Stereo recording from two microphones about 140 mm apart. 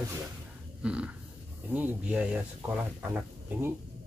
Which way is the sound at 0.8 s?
5° right (ahead or behind).